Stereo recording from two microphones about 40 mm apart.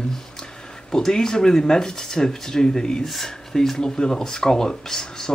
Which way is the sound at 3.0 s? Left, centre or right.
Centre.